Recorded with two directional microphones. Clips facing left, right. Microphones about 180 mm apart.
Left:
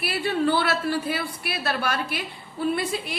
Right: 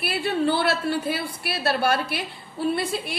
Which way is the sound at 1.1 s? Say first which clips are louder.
Right 1 dB; 30° right (ahead or behind).